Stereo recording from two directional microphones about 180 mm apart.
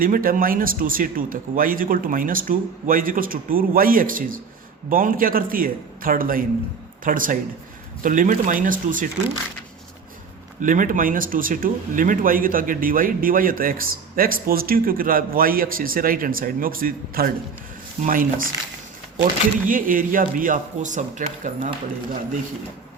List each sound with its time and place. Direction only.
0.0 s speech: 50° right (ahead or behind)
10.6 s speech: 45° right (ahead or behind)